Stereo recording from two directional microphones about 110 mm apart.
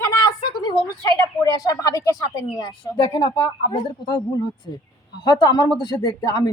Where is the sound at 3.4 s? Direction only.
40° left (ahead or behind).